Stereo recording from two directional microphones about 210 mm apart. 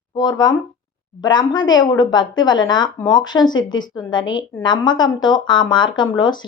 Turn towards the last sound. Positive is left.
turn(degrees=20)  # may be behind; listen again after turning